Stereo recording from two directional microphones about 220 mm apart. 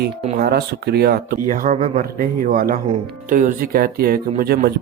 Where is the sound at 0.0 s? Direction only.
45° right (ahead or behind).